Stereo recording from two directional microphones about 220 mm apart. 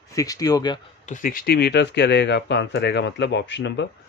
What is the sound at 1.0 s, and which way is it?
Speech, 35° left (ahead or behind).